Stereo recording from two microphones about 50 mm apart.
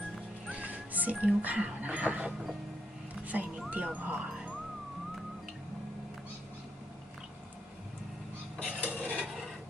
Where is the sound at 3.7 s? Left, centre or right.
Right.